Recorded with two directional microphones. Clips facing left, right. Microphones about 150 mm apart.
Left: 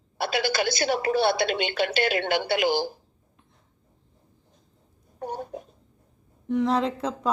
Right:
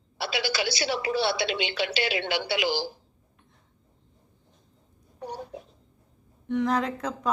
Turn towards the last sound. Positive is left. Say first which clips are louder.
# left 3 dB
turn(degrees=30)  # may be behind; listen again after turning